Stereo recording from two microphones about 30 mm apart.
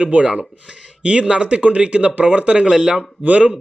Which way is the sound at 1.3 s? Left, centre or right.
Right.